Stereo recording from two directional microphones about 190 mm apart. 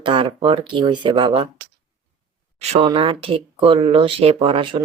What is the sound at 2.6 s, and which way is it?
Speech, 30° right (ahead or behind).